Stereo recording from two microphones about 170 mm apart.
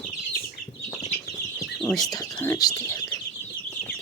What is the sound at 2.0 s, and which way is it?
Speech, 20° left (ahead or behind).